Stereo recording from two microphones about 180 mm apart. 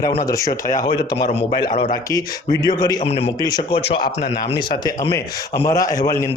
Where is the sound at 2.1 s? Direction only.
20° left (ahead or behind).